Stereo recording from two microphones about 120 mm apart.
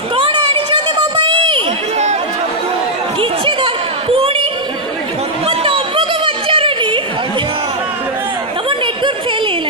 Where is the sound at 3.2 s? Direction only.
45° right (ahead or behind).